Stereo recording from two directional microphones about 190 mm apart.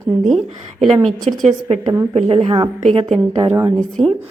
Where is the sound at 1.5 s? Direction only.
35° right (ahead or behind).